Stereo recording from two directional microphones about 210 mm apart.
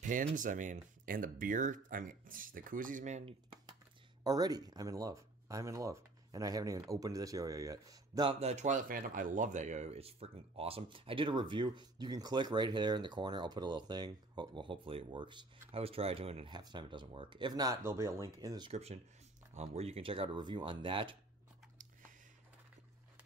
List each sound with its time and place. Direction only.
0.0 s speech: 40° right (ahead or behind)
4.2 s speech: 20° right (ahead or behind)
18.7 s speech: 30° right (ahead or behind)